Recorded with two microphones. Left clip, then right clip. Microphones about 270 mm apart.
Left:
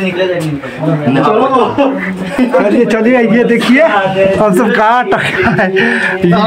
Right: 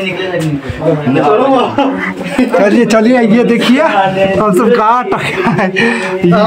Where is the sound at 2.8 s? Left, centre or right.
Right.